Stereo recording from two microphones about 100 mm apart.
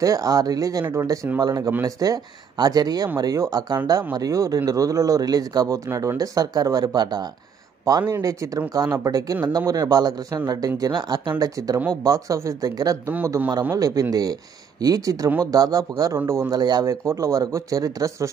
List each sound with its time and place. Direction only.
0.0 s speech: 35° right (ahead or behind)
8.1 s speech: 35° right (ahead or behind)